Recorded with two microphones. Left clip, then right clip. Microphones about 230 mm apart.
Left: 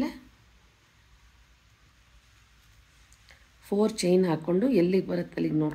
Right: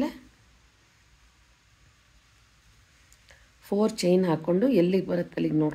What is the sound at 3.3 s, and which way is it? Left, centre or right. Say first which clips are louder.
Speech: right 1 dB; centre.